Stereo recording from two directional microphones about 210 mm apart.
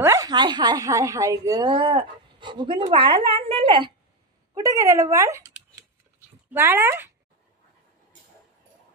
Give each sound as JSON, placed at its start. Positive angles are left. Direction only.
{"t": 0.0, "sound": "speech", "side_deg": -15}
{"t": 6.5, "sound": "speech", "side_deg": -10}